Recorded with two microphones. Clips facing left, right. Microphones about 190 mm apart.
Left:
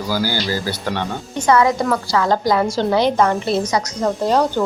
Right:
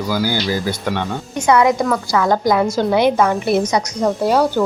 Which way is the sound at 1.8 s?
5° left (ahead or behind).